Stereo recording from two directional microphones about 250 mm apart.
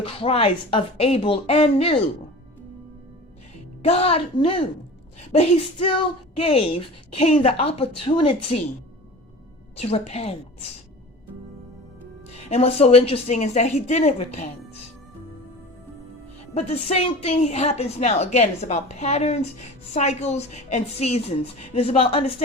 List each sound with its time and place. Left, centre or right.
0.0 s a woman's voice: left
3.8 s a woman's voice: left
9.8 s a woman's voice: left
12.3 s a woman's voice: left
16.6 s a woman's voice: left